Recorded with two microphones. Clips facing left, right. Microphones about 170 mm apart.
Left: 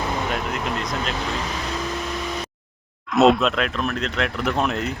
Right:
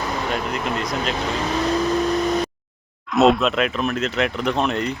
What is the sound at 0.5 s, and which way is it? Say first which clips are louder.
Speech: right 2 dB; centre (ahead or behind).